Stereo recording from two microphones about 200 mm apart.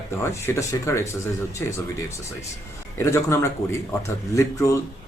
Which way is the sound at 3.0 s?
15° left (ahead or behind).